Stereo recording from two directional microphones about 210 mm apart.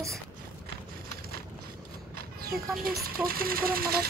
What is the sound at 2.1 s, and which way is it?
Speech, 45° right (ahead or behind).